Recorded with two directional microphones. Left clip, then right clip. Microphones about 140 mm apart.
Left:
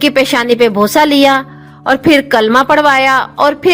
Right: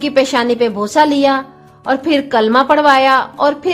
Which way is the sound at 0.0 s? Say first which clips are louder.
Left 3 dB; 30° left (ahead or behind).